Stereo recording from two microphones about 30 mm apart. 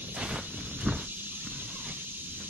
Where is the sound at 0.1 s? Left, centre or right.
Right.